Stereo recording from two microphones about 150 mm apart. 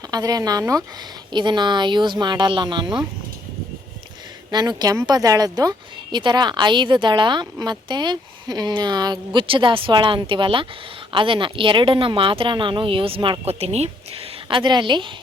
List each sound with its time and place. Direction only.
0.1 s a woman's voice: 25° right (ahead or behind)
4.5 s a woman's voice: 25° right (ahead or behind)